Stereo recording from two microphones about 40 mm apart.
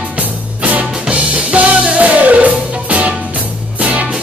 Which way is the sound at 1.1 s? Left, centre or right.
Right.